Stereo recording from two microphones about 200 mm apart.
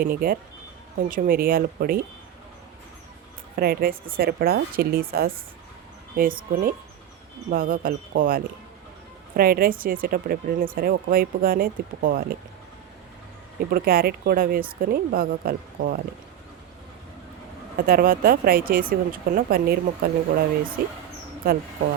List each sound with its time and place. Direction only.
0.0 s speech: 50° right (ahead or behind)
3.5 s speech: 50° right (ahead or behind)
13.7 s speech: 45° right (ahead or behind)
17.8 s speech: 45° right (ahead or behind)